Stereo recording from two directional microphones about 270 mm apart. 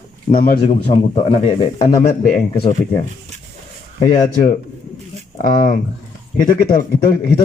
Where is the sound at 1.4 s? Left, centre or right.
Centre.